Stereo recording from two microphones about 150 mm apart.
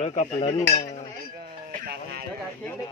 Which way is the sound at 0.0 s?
50° left (ahead or behind).